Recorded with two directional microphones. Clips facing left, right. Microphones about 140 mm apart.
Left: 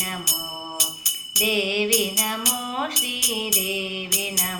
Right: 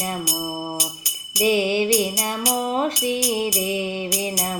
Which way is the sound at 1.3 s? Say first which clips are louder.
Right 5 dB; 30° right (ahead or behind).